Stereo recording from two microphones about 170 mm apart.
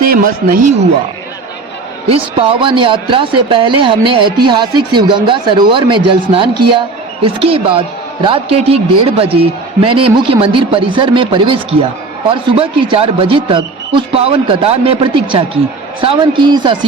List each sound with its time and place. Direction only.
0.0 s a man's voice: 55° right (ahead or behind)
2.0 s speech: 35° right (ahead or behind)